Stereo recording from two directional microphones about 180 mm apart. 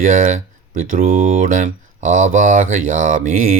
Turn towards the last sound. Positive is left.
turn(degrees=-45)  # may be behind; listen again after turning